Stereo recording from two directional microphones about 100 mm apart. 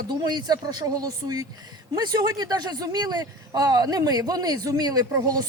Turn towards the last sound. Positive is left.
turn(degrees=-40)  # may be behind; listen again after turning